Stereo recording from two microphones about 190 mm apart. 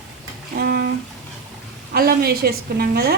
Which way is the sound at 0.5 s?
55° right (ahead or behind).